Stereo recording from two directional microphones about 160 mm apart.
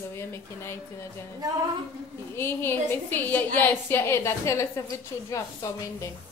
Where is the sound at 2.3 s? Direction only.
15° left (ahead or behind).